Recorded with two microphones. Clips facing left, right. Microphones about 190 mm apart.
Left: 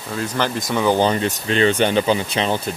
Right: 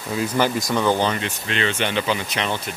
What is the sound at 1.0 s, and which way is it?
Speech, 35° left (ahead or behind).